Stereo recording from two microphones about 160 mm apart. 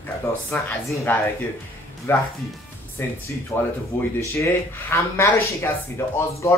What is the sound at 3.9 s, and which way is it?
Speech, 10° left (ahead or behind).